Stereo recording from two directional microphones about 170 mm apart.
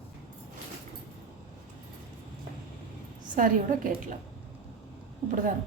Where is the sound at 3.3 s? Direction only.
55° right (ahead or behind).